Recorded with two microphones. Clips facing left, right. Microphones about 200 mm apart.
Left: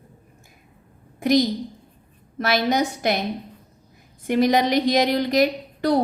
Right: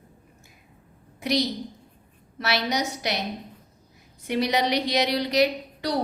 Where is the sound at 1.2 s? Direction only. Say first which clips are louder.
Left 6 dB; 45° left (ahead or behind).